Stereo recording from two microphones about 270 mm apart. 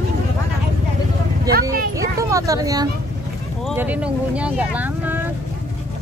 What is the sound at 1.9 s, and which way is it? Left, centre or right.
Speech, centre.